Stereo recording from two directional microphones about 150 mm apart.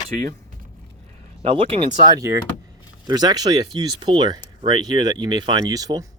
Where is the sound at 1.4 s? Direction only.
40° right (ahead or behind).